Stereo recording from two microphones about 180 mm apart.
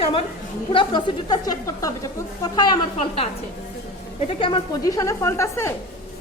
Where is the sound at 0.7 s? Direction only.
25° left (ahead or behind).